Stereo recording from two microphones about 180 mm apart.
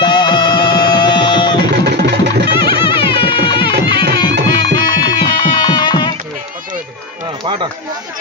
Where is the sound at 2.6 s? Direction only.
30° left (ahead or behind).